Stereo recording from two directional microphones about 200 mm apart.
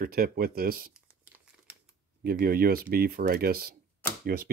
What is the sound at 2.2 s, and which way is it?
Speech, 50° right (ahead or behind).